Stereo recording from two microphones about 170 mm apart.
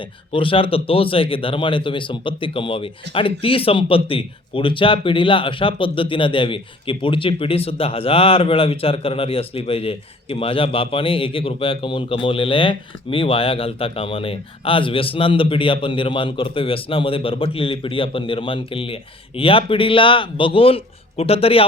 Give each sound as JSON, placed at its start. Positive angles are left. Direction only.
{"t": 0.3, "sound": "speech", "side_deg": 30}